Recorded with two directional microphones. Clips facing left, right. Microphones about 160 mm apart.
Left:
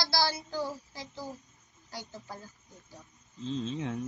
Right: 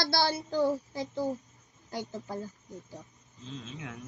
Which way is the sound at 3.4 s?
30° left (ahead or behind).